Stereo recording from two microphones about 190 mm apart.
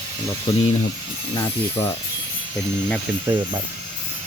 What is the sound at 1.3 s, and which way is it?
Speech, 30° left (ahead or behind).